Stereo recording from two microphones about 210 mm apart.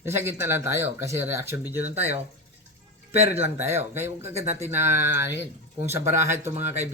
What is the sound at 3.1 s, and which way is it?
Speech, 30° right (ahead or behind).